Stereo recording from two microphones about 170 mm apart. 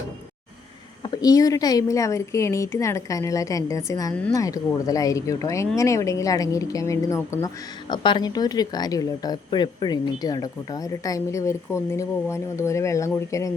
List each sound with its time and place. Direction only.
1.0 s speech: 25° left (ahead or behind)